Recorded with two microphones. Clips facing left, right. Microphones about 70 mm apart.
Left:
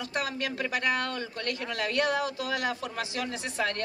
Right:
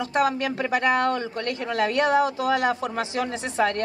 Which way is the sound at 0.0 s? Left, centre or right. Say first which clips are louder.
Right 9 dB; right.